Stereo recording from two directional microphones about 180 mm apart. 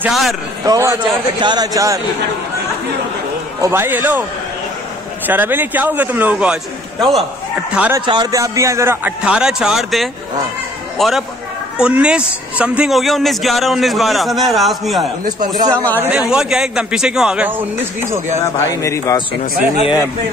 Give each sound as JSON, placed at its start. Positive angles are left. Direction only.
{"t": 0.0, "sound": "a man's voice", "side_deg": 0}
{"t": 0.7, "sound": "a man's voice", "side_deg": -15}
{"t": 3.6, "sound": "a man's voice", "side_deg": -10}
{"t": 5.2, "sound": "a man's voice", "side_deg": -10}
{"t": 8.0, "sound": "a man's voice", "side_deg": -25}
{"t": 15.2, "sound": "speech", "side_deg": -20}
{"t": 16.0, "sound": "a man's voice", "side_deg": -5}
{"t": 18.4, "sound": "a man's voice", "side_deg": 15}